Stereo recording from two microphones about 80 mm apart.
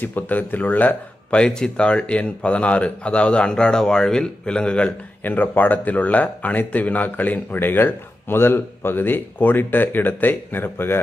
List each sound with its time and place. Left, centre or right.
0.0 s speech: left